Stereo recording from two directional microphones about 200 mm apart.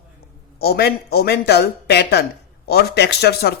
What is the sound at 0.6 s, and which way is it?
Speech, 50° left (ahead or behind).